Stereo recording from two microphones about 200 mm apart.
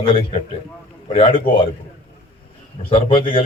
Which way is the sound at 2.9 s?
25° left (ahead or behind).